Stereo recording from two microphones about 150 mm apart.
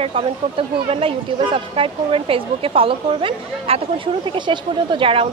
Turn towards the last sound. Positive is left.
turn(degrees=-35)  # may be behind; listen again after turning